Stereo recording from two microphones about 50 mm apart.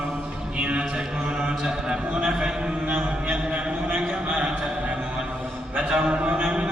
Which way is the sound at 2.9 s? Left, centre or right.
Right.